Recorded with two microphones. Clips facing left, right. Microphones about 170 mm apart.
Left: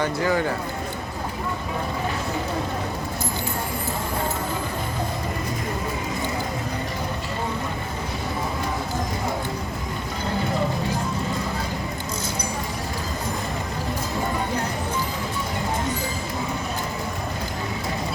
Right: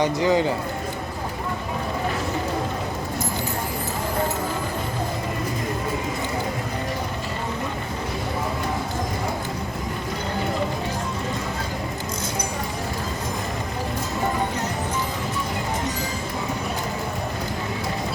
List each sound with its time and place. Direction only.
0.0 s a man's voice: 20° right (ahead or behind)